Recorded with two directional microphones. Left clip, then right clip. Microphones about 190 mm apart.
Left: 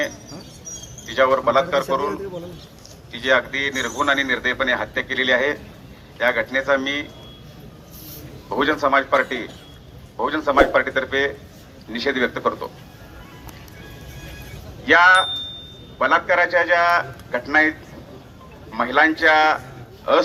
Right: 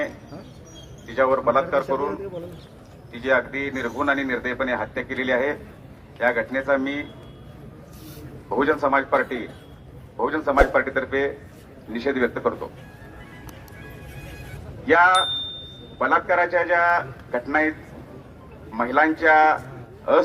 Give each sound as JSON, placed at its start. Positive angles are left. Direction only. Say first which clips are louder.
{"t": 1.0, "sound": "speech", "louder": "left 3 dB", "side_deg": -15}
{"t": 8.4, "sound": "speech", "louder": "left 2 dB", "side_deg": -15}
{"t": 14.8, "sound": "speech", "louder": "left 3 dB", "side_deg": -15}